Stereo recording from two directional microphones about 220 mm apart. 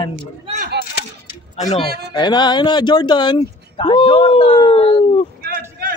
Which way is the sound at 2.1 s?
20° left (ahead or behind).